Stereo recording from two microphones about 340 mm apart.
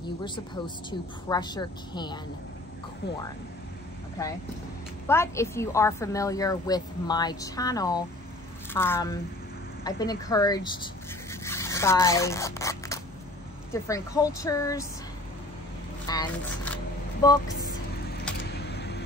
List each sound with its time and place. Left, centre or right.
0.8 s a woman's voice: centre
5.0 s a woman's voice: centre
16.1 s single-lens reflex camera: centre
18.4 s a sound: left